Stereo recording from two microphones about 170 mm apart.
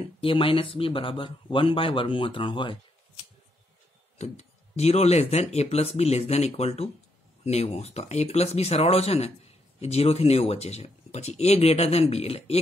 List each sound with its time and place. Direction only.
0.0 s speech: 30° left (ahead or behind)
4.2 s speech: 40° left (ahead or behind)